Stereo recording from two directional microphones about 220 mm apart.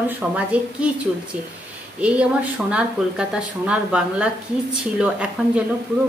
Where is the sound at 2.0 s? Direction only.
5° right (ahead or behind).